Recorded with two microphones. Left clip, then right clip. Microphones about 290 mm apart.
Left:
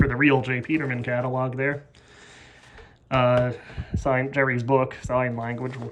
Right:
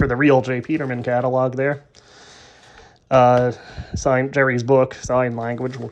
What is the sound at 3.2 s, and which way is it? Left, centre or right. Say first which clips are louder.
Speech: right 7 dB; centre.